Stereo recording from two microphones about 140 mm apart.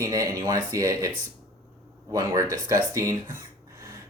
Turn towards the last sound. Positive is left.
turn(degrees=-20)  # may be behind; listen again after turning